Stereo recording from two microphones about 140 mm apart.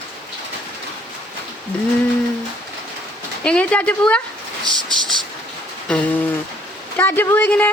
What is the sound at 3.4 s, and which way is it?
Speech, 10° left (ahead or behind).